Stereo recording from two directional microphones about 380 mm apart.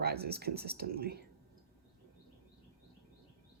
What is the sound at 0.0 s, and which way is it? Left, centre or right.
Speech, right.